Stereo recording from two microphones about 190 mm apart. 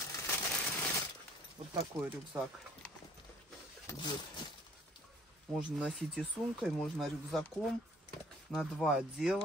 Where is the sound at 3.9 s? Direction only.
20° left (ahead or behind).